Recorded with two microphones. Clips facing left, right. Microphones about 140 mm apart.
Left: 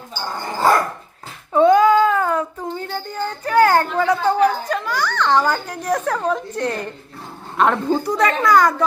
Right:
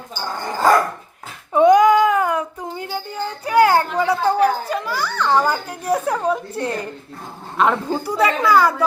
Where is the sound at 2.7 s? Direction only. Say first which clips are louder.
Even; 10° right (ahead or behind).